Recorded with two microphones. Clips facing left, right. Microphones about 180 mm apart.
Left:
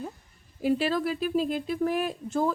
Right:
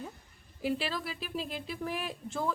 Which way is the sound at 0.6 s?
45° left (ahead or behind).